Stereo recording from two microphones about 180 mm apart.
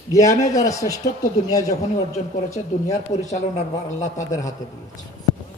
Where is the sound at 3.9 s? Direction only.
40° left (ahead or behind).